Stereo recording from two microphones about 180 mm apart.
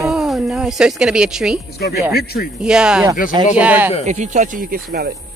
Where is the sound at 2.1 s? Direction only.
60° left (ahead or behind).